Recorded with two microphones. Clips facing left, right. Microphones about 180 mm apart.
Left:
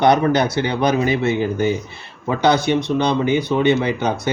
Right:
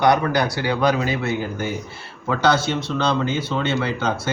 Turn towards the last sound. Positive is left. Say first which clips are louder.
# left 3 dB
turn(degrees=20)  # may be behind; listen again after turning